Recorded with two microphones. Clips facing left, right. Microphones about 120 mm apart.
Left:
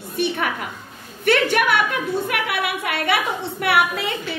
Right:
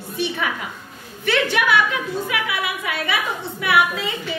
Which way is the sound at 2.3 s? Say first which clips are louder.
Left 1 dB; 65° left (ahead or behind).